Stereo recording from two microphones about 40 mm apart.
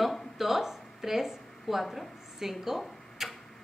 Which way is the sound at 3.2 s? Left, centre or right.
Centre.